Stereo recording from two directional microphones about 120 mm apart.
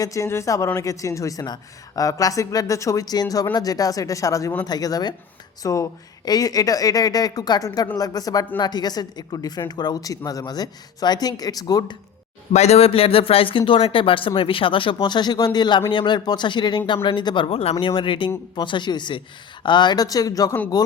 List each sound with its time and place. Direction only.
0.0 s a woman's voice: 25° left (ahead or behind)
12.5 s a woman's voice: 60° left (ahead or behind); by 20.6 s 30° left (ahead or behind)